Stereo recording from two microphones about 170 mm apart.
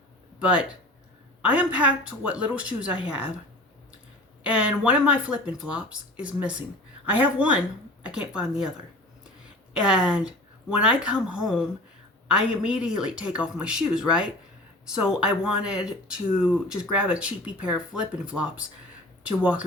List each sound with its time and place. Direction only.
0.3 s speech: 5° right (ahead or behind)
2.9 s a woman's voice: 30° left (ahead or behind)
4.4 s a woman's voice: 5° right (ahead or behind)
9.7 s a woman's voice: 5° right (ahead or behind)